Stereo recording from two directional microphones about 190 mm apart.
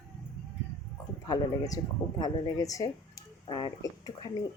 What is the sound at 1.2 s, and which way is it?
Speech, 20° left (ahead or behind).